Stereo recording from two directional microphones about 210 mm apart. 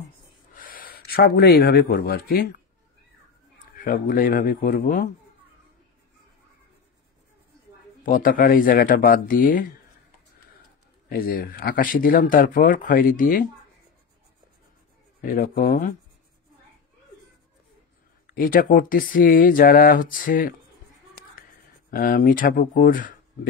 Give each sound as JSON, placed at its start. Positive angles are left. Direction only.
{"t": 0.6, "sound": "speech", "side_deg": 40}
{"t": 3.7, "sound": "speech", "side_deg": 40}
{"t": 8.0, "sound": "speech", "side_deg": 40}
{"t": 11.1, "sound": "speech", "side_deg": 45}
{"t": 15.2, "sound": "speech", "side_deg": 40}
{"t": 18.2, "sound": "speech", "side_deg": 45}
{"t": 21.9, "sound": "speech", "side_deg": 40}